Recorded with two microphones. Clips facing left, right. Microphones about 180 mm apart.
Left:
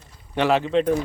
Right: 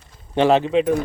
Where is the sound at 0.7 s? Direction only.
10° right (ahead or behind).